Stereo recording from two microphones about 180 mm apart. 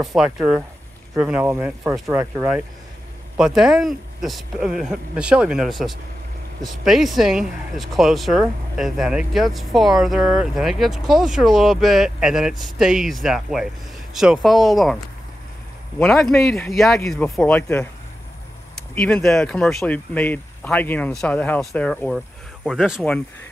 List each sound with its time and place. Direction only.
0.0 s speech: centre (ahead or behind)
16.0 s speech: 5° left (ahead or behind)
18.9 s speech: 5° left (ahead or behind)